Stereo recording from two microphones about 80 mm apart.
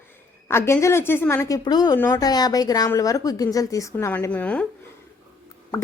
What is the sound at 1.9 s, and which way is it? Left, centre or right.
Speech, left.